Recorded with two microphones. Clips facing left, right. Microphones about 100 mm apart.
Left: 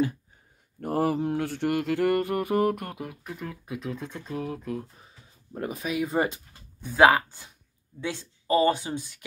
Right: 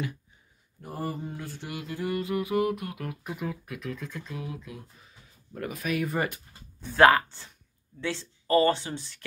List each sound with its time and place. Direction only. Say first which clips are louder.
0.7 s mantra: left 9 dB; 70° left (ahead or behind); by 3.0 s 45° left (ahead or behind)
3.3 s speech: right 5 dB; 10° right (ahead or behind)
3.6 s speech: left 3 dB; 25° left (ahead or behind); by 5.0 s 40° left (ahead or behind)
5.5 s speech: even; 25° left (ahead or behind)
6.8 s speech: even; 10° left (ahead or behind)